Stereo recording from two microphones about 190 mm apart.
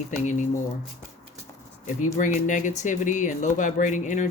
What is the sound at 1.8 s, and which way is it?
Speech, 45° left (ahead or behind).